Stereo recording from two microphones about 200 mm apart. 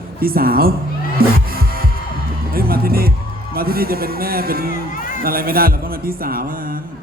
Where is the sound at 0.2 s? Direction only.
45° right (ahead or behind).